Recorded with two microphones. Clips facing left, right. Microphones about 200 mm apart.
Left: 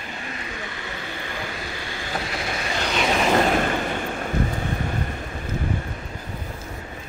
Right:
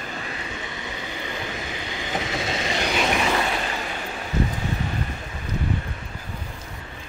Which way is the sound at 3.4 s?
50° left (ahead or behind).